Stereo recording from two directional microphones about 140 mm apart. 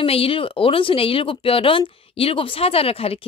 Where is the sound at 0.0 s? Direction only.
40° left (ahead or behind).